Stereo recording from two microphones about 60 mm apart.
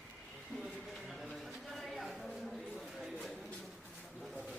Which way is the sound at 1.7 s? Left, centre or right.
Centre.